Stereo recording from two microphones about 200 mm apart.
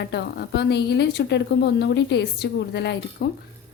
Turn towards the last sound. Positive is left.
turn(degrees=55)  # may be behind; listen again after turning